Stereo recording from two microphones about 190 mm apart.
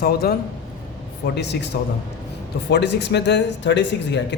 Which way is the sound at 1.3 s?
65° left (ahead or behind).